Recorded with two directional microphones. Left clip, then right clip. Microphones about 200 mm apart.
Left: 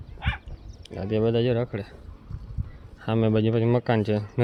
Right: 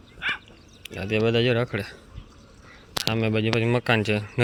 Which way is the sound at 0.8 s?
15° left (ahead or behind).